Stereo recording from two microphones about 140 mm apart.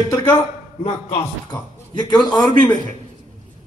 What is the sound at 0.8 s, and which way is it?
Speech, 45° left (ahead or behind).